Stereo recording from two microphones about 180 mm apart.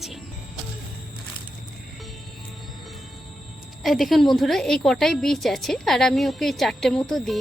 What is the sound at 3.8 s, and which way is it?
A woman's voice, centre (ahead or behind).